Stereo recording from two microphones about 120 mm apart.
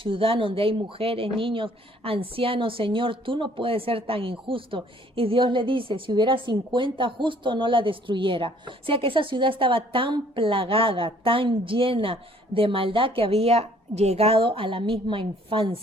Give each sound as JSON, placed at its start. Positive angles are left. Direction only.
{"t": 0.0, "sound": "speech", "side_deg": -50}